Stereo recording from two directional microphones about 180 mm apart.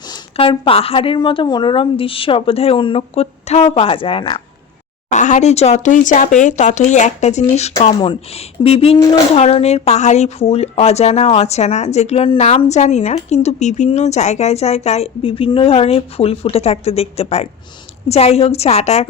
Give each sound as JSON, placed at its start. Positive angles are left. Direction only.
{"t": 0.1, "sound": "speech", "side_deg": 30}
{"t": 5.1, "sound": "speech", "side_deg": 40}